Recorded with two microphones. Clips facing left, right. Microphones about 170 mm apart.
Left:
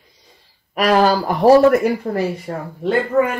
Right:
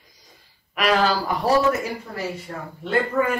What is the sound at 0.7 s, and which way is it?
Speech, 45° left (ahead or behind).